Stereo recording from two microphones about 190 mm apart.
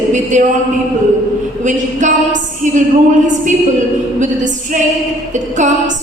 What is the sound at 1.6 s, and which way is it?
A woman's voice, 40° right (ahead or behind).